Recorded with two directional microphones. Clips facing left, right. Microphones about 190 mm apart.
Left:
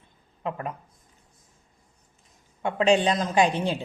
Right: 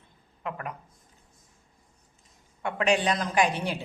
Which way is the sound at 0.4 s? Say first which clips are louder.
Left 4 dB; 25° left (ahead or behind).